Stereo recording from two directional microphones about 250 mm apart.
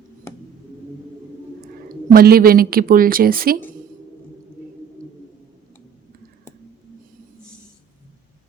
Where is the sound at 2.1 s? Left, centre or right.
Right.